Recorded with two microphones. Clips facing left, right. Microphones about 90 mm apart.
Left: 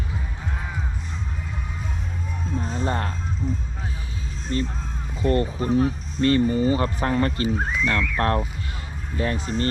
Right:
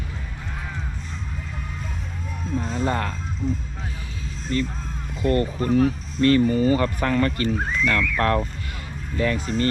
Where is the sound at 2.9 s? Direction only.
35° left (ahead or behind).